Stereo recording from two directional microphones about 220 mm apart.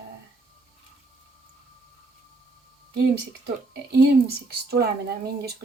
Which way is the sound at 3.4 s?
50° right (ahead or behind).